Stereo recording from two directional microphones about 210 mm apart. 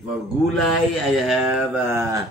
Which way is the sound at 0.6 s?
Centre (ahead or behind).